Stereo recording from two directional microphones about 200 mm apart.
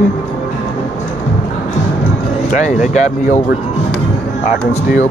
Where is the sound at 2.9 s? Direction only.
40° left (ahead or behind).